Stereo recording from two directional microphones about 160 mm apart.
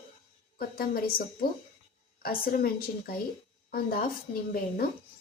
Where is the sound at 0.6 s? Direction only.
65° left (ahead or behind).